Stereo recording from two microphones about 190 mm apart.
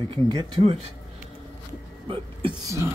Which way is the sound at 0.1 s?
25° right (ahead or behind).